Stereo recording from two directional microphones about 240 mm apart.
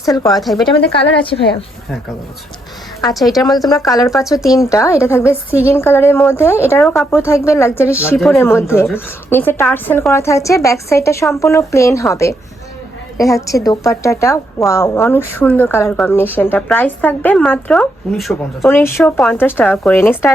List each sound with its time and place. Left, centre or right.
0.0 s speech: centre
0.3 s speech: centre
0.9 s a woman's voice: left
1.2 s a woman's voice: left
3.7 s speech: centre
13.3 s speech: centre